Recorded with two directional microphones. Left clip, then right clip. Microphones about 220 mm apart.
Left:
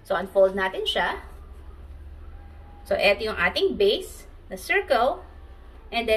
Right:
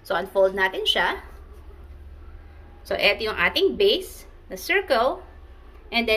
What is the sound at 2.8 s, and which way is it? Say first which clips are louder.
A woman's voice: even; 40° right (ahead or behind).